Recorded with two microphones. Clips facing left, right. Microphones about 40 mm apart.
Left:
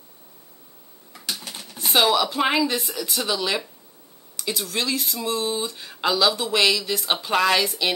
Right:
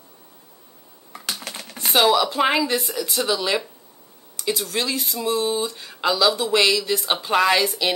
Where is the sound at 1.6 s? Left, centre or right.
Right.